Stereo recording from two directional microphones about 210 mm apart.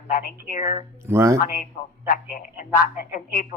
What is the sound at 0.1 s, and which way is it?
Speech, 45° left (ahead or behind).